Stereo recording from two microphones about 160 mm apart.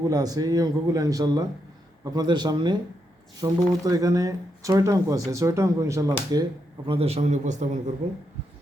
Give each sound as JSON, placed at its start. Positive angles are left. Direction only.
{"t": 0.1, "sound": "speech", "side_deg": -25}
{"t": 6.8, "sound": "a man's voice", "side_deg": -35}